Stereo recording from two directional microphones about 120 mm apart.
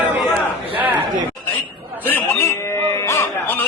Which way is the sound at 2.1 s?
15° left (ahead or behind).